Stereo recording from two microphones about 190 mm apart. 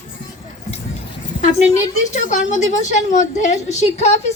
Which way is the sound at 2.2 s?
40° left (ahead or behind).